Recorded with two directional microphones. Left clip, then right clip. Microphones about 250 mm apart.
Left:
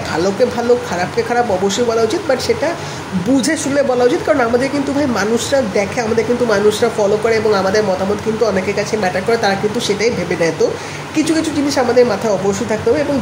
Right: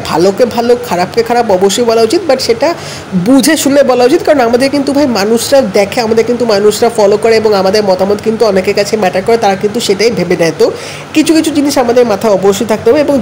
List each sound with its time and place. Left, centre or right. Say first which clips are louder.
0.1 s a woman's voice: right 7 dB; right